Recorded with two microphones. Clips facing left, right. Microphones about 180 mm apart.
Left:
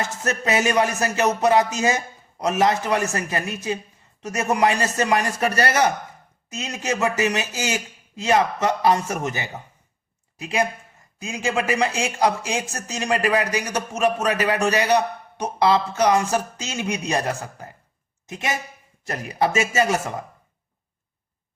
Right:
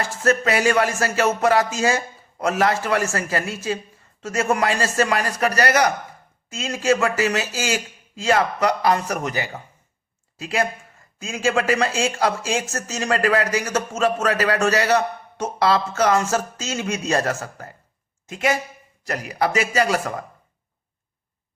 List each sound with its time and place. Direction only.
0.0 s a man's voice: 20° left (ahead or behind)